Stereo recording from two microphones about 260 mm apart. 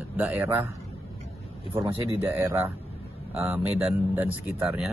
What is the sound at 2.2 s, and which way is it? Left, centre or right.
Speech, centre.